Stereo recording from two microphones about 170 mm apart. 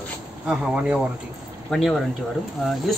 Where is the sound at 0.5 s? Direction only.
5° right (ahead or behind).